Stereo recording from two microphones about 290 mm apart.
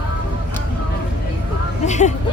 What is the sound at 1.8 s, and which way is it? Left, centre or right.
Music, left.